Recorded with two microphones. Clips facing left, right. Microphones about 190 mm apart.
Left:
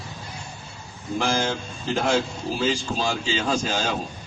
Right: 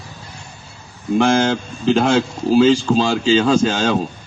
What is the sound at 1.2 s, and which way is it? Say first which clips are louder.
A man's voice: right 9 dB; 80° right.